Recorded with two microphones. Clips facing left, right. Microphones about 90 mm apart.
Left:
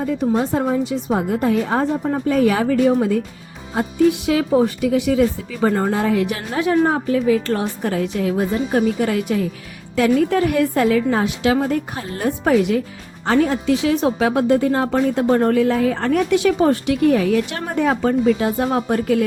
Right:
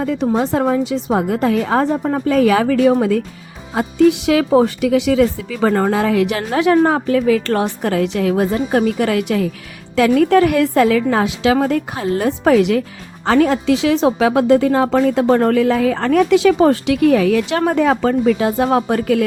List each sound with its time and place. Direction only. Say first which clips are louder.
0.0 s a woman's voice: right 2 dB; 90° right
10.2 s a woman's voice: right 4 dB; 75° right (ahead or behind); by 19.2 s 90° right